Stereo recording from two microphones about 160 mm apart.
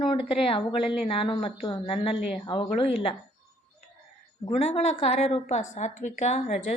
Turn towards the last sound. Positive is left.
turn(degrees=45)  # may be behind; listen again after turning